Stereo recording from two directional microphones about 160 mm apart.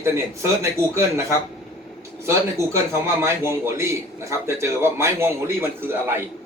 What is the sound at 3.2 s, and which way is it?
A man's voice, 15° right (ahead or behind).